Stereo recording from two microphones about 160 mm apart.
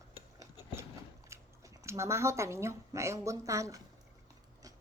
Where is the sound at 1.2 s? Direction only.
15° right (ahead or behind).